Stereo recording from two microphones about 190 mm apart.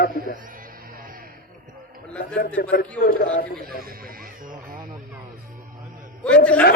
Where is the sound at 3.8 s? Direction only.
50° right (ahead or behind).